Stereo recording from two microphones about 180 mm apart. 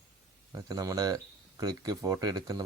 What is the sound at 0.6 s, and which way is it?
Speech, 20° right (ahead or behind).